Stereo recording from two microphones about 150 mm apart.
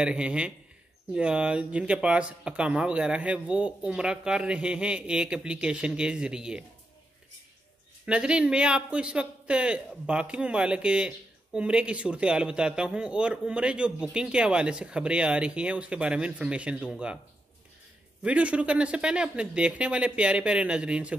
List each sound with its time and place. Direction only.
0.0 s a man's voice: 5° right (ahead or behind)
8.0 s a man's voice: 5° right (ahead or behind)
18.2 s a man's voice: 10° right (ahead or behind)